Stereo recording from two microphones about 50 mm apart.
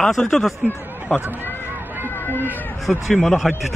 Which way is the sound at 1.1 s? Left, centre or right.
Left.